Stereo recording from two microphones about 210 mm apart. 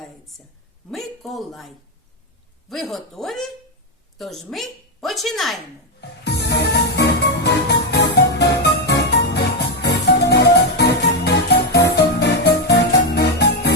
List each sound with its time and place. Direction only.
0.9 s a woman's voice: centre (ahead or behind)
6.0 s music: 55° left (ahead or behind)